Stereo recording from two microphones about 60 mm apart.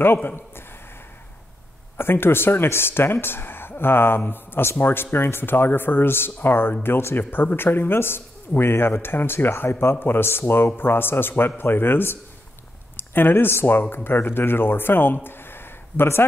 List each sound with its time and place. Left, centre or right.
0.0 s speech: left
2.0 s speech: left
15.2 s a sound: left